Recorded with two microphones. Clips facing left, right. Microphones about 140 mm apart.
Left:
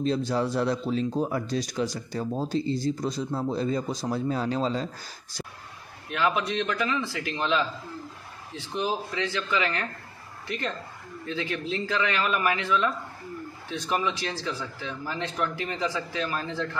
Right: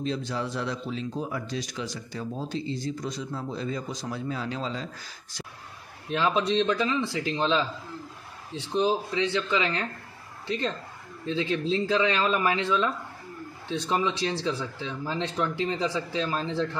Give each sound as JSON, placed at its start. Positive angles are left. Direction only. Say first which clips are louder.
{"t": 0.3, "sound": "a man's voice", "louder": "left 5 dB", "side_deg": 40}
{"t": 6.0, "sound": "speech", "louder": "right 1 dB", "side_deg": -25}
{"t": 8.7, "sound": "speech", "louder": "right 4 dB", "side_deg": -25}